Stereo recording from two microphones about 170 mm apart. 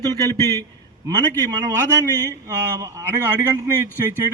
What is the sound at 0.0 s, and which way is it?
A man's voice, 20° right (ahead or behind).